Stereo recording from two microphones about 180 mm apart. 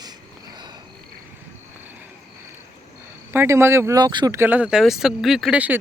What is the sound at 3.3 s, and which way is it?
Speech, 15° right (ahead or behind).